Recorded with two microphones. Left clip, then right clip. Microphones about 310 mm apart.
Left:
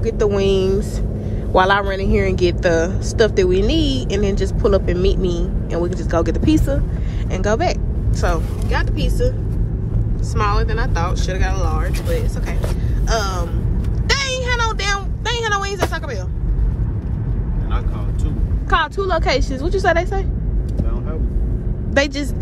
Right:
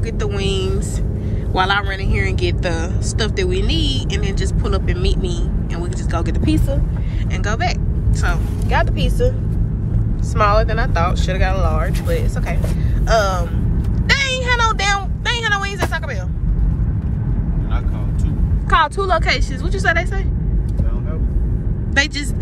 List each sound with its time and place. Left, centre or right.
0.0 s speech: left
8.6 s speech: centre
10.3 s speech: centre
14.0 s vehicle: centre
18.7 s speech: centre
21.9 s a woman's voice: left